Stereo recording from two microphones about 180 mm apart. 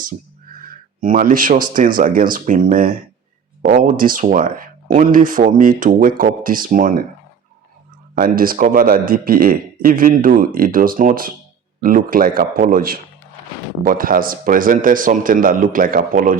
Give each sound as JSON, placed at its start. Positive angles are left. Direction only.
{"t": 0.6, "sound": "a sound", "side_deg": -50}
{"t": 1.6, "sound": "speech", "side_deg": -50}
{"t": 8.1, "sound": "speech", "side_deg": -50}